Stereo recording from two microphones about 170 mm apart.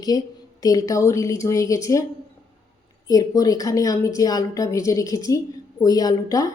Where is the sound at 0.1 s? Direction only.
20° left (ahead or behind).